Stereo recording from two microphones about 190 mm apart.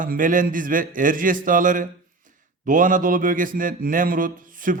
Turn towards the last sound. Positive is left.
turn(degrees=-45)  # may be behind; listen again after turning